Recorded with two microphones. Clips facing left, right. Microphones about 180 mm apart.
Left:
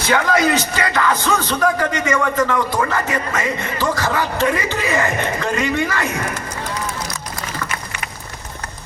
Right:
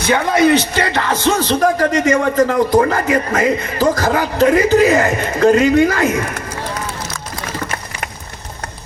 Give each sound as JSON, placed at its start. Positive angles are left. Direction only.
{"t": 0.3, "sound": "speech", "side_deg": -65}
{"t": 0.9, "sound": "a man's voice", "side_deg": -35}